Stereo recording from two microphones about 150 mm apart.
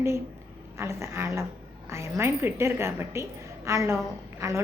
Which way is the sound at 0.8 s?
20° right (ahead or behind).